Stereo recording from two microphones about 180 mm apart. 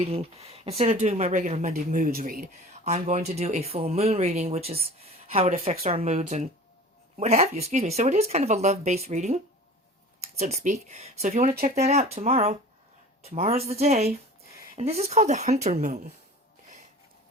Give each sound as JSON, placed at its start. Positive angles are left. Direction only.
{"t": 0.0, "sound": "speech", "side_deg": -35}
{"t": 15.7, "sound": "speech", "side_deg": -50}